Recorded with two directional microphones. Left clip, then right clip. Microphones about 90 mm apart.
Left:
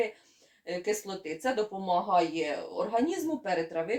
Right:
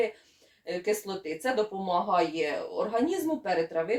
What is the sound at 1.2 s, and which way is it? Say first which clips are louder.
Speech: right 2 dB; 30° left (ahead or behind).